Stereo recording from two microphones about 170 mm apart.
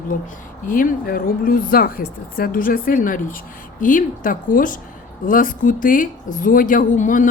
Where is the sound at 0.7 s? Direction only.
55° left (ahead or behind).